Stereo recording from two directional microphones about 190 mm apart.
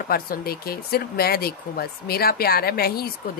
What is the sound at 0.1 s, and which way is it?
Speech, 50° left (ahead or behind).